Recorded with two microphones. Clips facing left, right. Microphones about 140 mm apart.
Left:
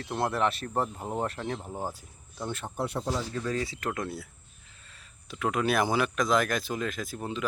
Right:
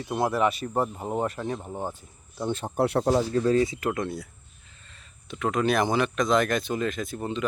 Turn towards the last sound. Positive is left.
turn(degrees=0)  # may be behind; listen again after turning